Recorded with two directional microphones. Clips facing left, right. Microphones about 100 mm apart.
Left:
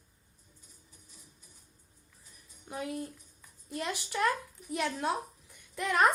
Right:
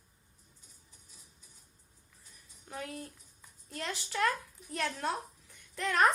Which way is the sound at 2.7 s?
15° left (ahead or behind).